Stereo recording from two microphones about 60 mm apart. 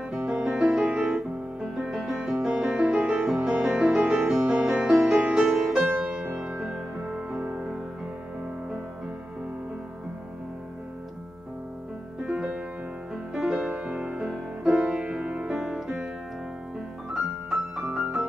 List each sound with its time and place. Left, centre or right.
0.1 s music: centre
6.2 s music: right; by 7.8 s centre
12.2 s music: centre
13.3 s music: centre
13.7 s music: centre
14.2 s music: centre
14.8 s music: centre